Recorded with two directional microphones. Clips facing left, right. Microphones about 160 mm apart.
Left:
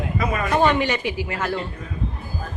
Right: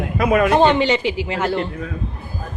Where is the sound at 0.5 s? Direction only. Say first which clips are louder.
Right 4 dB; 25° right (ahead or behind).